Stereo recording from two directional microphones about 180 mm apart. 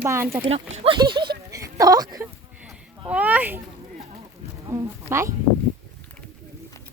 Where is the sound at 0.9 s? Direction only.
25° right (ahead or behind).